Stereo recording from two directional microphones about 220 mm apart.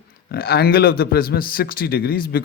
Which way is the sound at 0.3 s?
45° left (ahead or behind).